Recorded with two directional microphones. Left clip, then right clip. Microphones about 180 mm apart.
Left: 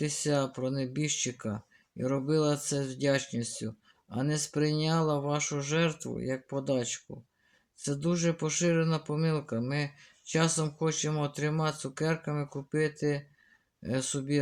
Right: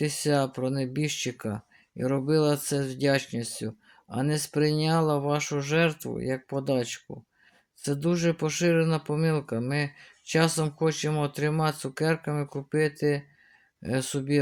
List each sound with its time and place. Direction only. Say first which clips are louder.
0.0 s speech: right 4 dB; 30° right (ahead or behind)